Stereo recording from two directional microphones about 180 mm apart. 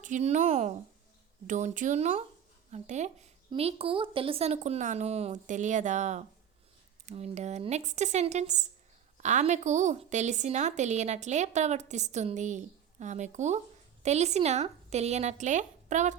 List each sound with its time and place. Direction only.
0.0 s a woman's voice: 40° right (ahead or behind)